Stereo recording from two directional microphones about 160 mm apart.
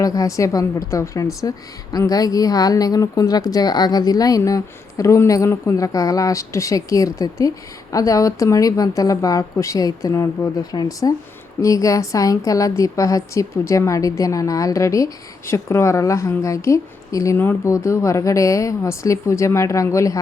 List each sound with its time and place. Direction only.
0.0 s a woman's voice: 20° left (ahead or behind)